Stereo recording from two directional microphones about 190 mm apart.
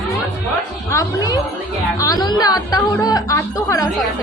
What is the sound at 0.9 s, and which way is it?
Speech, 20° left (ahead or behind).